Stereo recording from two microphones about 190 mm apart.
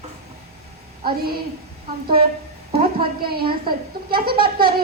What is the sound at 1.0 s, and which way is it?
Speech, 50° right (ahead or behind).